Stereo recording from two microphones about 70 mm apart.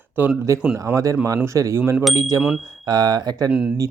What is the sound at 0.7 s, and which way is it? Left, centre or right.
Speech, right.